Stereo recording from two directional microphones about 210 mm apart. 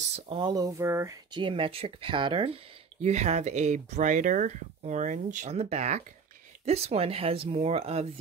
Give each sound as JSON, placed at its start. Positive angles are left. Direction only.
{"t": 0.1, "sound": "speech", "side_deg": -25}